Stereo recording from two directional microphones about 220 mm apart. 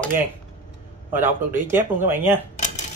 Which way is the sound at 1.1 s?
10° right (ahead or behind).